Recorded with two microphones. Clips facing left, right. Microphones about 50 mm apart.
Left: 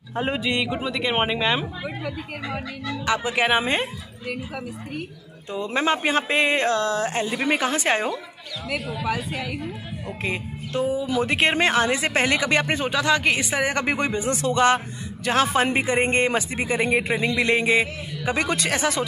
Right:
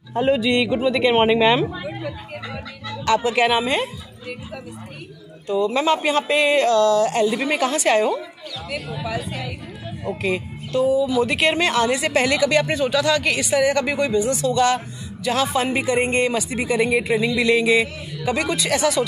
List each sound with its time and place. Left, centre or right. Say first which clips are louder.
0.1 s speech: right 6 dB; left
0.9 s speech: right 7 dB; centre
3.1 s speech: right 4 dB; centre
5.5 s speech: right 4 dB; left
10.2 s a woman's voice: right 3 dB; left